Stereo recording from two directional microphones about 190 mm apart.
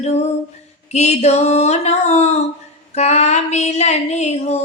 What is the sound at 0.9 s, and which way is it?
Female singing, 35° left (ahead or behind).